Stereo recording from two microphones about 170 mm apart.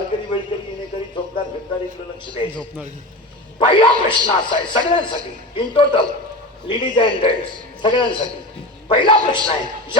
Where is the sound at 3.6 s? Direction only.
30° left (ahead or behind).